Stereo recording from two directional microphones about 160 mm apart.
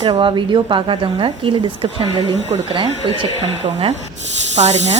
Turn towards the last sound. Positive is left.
turn(degrees=-45)  # may be behind; listen again after turning